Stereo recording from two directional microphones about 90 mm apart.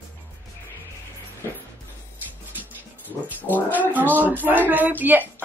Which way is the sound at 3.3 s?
20° right (ahead or behind).